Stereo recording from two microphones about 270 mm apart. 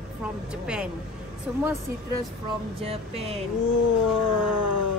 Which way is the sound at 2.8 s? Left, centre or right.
Right.